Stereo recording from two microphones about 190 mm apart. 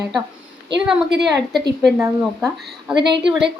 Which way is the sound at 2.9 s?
25° right (ahead or behind).